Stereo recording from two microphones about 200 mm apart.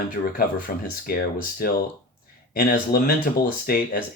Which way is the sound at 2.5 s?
45° left (ahead or behind).